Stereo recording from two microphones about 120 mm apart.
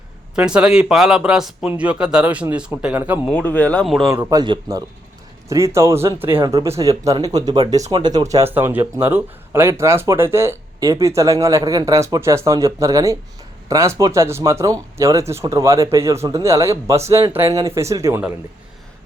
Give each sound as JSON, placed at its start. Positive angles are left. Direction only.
{"t": 0.3, "sound": "speech", "side_deg": -5}
{"t": 3.2, "sound": "speech", "side_deg": 10}
{"t": 3.8, "sound": "speech", "side_deg": 0}
{"t": 4.1, "sound": "speech", "side_deg": -30}
{"t": 5.5, "sound": "speech", "side_deg": -25}
{"t": 8.5, "sound": "speech", "side_deg": -15}